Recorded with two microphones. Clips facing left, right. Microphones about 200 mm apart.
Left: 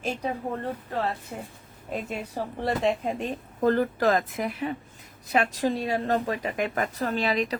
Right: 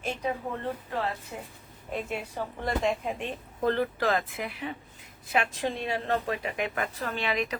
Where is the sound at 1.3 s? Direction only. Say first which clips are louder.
Left 3 dB; 40° left (ahead or behind).